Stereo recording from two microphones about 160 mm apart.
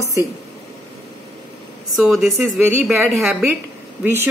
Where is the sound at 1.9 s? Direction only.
Centre (ahead or behind).